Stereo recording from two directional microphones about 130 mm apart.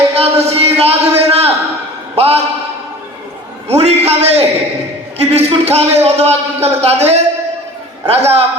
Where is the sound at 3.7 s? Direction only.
55° right (ahead or behind).